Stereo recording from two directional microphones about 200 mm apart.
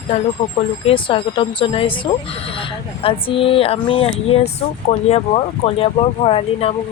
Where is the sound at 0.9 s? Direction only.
25° left (ahead or behind).